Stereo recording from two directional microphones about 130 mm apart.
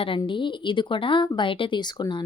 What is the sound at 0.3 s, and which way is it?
A woman's voice, 40° left (ahead or behind).